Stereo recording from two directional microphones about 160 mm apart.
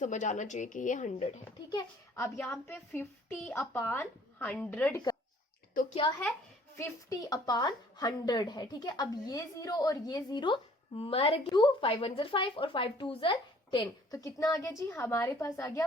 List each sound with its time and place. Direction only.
0.0 s speech: 50° left (ahead or behind)
1.7 s a woman's voice: 20° left (ahead or behind)
5.9 s a child's voice: 30° left (ahead or behind)
6.7 s a woman's voice: 20° left (ahead or behind)